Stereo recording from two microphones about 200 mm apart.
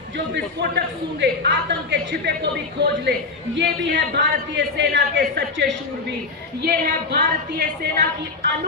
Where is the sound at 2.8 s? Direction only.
60° right (ahead or behind).